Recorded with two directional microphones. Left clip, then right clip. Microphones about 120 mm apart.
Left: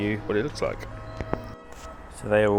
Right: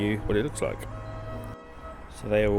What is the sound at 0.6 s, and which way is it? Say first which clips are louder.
Speech: left 2 dB; 20° right (ahead or behind).